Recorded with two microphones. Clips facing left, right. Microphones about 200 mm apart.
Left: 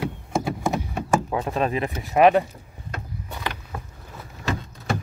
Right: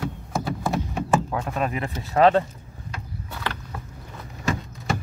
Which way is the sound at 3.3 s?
15° left (ahead or behind).